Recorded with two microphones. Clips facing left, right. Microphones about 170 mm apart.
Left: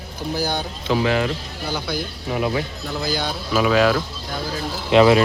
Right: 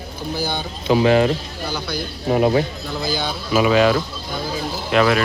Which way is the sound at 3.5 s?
5° right (ahead or behind).